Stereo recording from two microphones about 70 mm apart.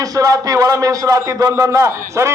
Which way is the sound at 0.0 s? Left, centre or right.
Right.